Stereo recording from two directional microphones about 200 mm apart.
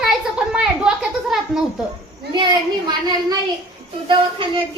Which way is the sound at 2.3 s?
20° right (ahead or behind).